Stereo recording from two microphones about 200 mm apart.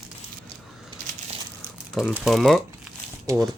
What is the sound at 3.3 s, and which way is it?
Speech, 15° right (ahead or behind).